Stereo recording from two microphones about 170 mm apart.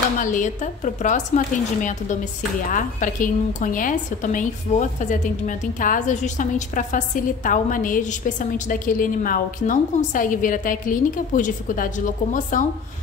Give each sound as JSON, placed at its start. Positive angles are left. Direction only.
{"t": 0.2, "sound": "a woman's voice", "side_deg": 50}